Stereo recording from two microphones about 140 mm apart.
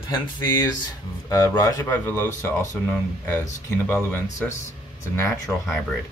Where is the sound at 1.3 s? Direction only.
25° left (ahead or behind).